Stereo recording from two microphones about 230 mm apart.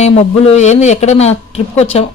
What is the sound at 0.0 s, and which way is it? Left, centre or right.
A woman's voice, left.